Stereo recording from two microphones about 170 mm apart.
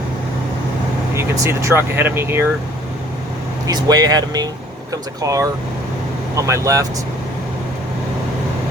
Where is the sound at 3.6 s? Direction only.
25° right (ahead or behind).